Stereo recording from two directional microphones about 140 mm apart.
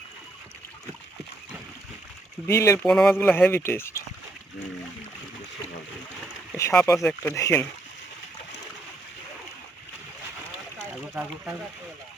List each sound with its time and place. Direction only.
2.5 s speech: 20° left (ahead or behind)
2.8 s speech: 5° left (ahead or behind)
6.6 s speech: 20° left (ahead or behind)
11.1 s speech: 10° right (ahead or behind)